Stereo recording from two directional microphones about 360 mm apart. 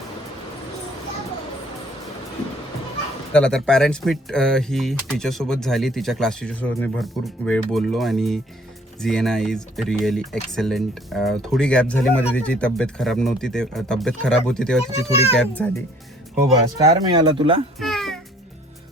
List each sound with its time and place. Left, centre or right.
3.3 s speech: centre
15.1 s a child's voice: centre
15.4 s speech: centre
16.3 s speech: centre
17.7 s a child's voice: centre